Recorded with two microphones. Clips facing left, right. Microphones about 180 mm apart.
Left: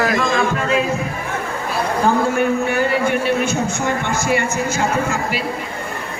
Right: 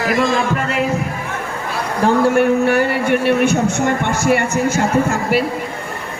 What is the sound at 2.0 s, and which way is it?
A man's voice, 70° right (ahead or behind).